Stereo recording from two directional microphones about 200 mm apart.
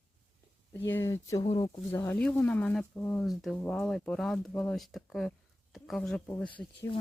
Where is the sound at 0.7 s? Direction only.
10° left (ahead or behind).